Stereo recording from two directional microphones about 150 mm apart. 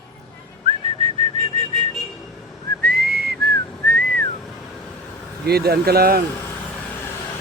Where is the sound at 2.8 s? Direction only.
90° right.